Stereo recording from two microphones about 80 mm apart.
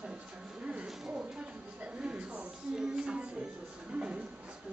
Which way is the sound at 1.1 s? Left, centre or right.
Centre.